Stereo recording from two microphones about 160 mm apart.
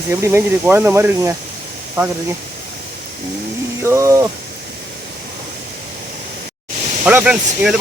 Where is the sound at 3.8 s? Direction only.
20° right (ahead or behind).